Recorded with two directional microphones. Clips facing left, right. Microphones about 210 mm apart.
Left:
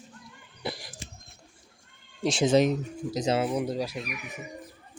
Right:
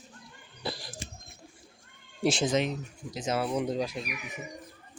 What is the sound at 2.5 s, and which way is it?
Speech, 40° left (ahead or behind).